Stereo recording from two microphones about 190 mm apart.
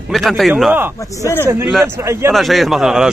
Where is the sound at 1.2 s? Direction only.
15° left (ahead or behind).